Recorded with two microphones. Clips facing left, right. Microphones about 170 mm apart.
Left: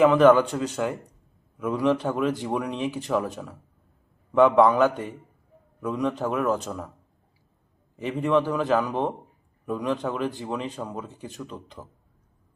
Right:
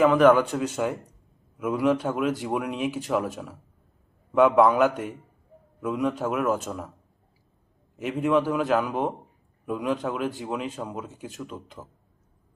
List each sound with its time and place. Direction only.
0.0 s a man's voice: centre (ahead or behind)
7.9 s a man's voice: centre (ahead or behind)